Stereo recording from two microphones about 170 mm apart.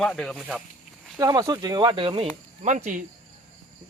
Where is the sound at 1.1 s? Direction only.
20° right (ahead or behind).